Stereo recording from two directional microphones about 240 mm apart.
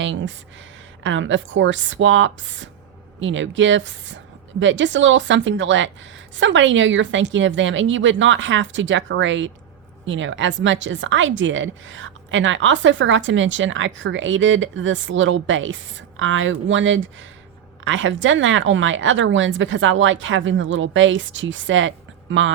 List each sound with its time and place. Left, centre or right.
0.0 s a woman's voice: right